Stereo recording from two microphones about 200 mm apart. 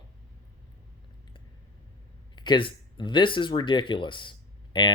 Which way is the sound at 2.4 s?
25° left (ahead or behind).